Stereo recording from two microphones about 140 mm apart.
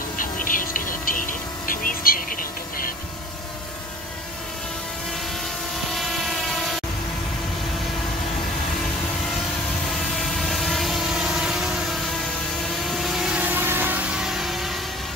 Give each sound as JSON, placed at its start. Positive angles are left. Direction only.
{"t": 0.2, "sound": "a sound", "side_deg": 75}
{"t": 5.9, "sound": "train", "side_deg": 0}
{"t": 10.1, "sound": "vehicle", "side_deg": 0}